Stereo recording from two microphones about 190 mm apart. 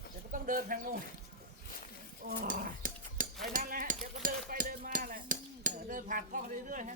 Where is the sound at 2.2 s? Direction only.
50° right (ahead or behind).